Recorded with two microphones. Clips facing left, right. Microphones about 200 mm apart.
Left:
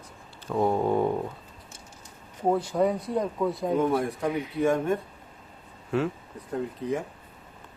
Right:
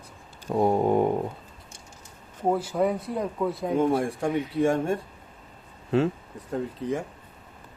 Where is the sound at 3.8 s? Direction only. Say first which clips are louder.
Right 4 dB; 30° right (ahead or behind).